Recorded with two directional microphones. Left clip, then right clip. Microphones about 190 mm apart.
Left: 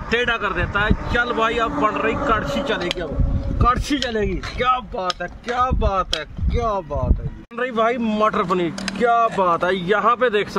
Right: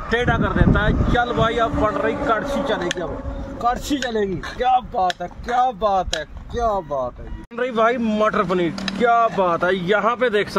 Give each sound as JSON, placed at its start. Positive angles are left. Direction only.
{"t": 0.1, "sound": "speech", "side_deg": -5}
{"t": 6.5, "sound": "speech", "side_deg": -5}
{"t": 7.5, "sound": "speech", "side_deg": -25}